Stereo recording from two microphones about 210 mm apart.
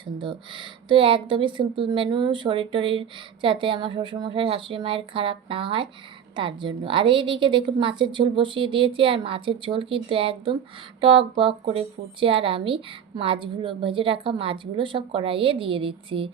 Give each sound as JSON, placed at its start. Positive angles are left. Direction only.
{"t": 0.0, "sound": "speech", "side_deg": -25}